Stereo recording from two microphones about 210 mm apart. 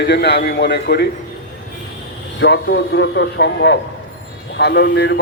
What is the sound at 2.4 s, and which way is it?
A man's voice, 55° left (ahead or behind).